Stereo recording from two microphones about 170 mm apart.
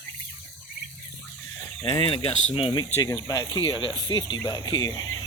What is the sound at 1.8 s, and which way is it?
Speech, 30° left (ahead or behind).